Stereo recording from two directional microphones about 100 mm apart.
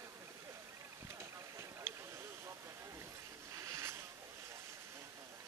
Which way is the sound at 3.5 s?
30° right (ahead or behind).